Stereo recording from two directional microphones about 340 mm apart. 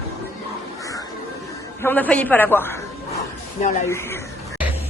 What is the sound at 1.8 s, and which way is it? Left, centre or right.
A man's voice, centre.